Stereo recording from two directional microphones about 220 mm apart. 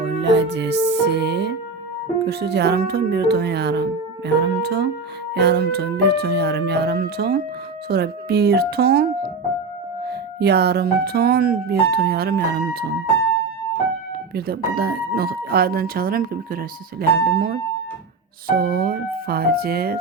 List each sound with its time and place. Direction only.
0.0 s speech: 55° right (ahead or behind)
14.3 s speech: 45° right (ahead or behind)